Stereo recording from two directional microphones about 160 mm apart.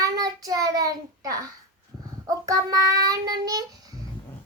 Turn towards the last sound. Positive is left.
turn(degrees=-25)  # may be behind; listen again after turning